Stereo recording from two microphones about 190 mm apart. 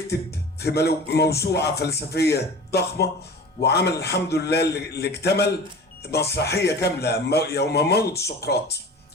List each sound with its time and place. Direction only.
0.1 s speech: 60° left (ahead or behind)